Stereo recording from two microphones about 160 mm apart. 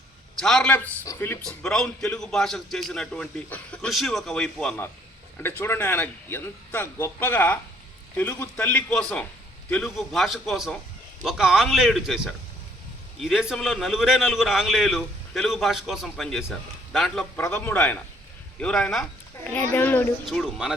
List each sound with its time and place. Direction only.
0.3 s a man's voice: 5° left (ahead or behind)
1.0 s a man's voice: 15° left (ahead or behind)
20.2 s a man's voice: centre (ahead or behind)